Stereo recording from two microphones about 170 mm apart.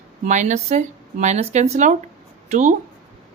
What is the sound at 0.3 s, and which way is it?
Speech, 45° right (ahead or behind).